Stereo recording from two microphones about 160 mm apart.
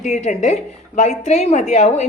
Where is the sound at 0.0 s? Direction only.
50° left (ahead or behind).